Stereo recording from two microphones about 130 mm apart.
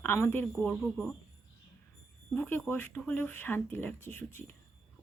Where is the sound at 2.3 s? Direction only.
15° left (ahead or behind).